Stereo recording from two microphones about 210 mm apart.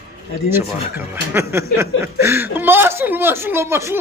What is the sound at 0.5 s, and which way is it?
Speech, 10° right (ahead or behind).